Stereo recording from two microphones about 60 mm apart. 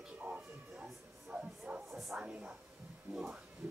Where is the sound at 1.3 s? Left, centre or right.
Right.